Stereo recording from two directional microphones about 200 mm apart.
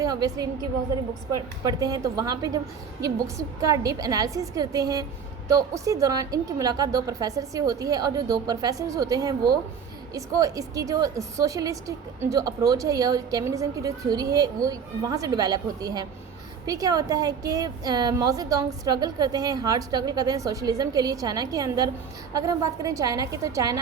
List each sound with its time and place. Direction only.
0.0 s a woman's voice: 15° right (ahead or behind)